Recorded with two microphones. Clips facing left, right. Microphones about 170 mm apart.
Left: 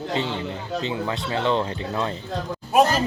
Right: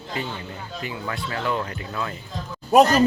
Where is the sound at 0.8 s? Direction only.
25° left (ahead or behind).